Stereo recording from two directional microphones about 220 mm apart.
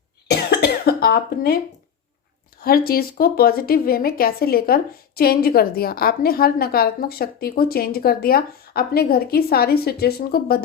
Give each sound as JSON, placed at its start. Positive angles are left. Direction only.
{"t": 0.3, "sound": "cough", "side_deg": 45}
{"t": 2.6, "sound": "speech", "side_deg": 40}